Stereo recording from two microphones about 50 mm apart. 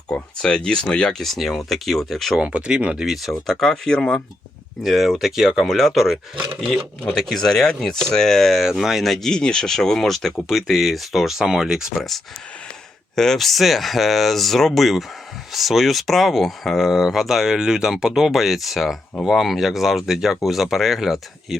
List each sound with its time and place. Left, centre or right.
0.1 s speech: centre
1.2 s speech: centre
2.4 s speech: right
3.1 s speech: centre
4.8 s speech: centre
7.1 s speech: centre
8.8 s speech: centre
9.0 s speech: centre
13.1 s speech: centre